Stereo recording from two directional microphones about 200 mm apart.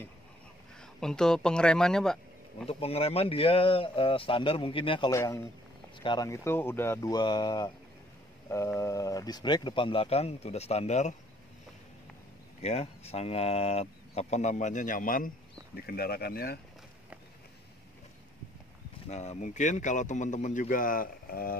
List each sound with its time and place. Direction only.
0.7 s speech: 5° left (ahead or behind)
2.6 s speech: 30° left (ahead or behind)
12.6 s speech: 30° left (ahead or behind); by 16.5 s 50° left (ahead or behind)
19.0 s speech: 35° left (ahead or behind)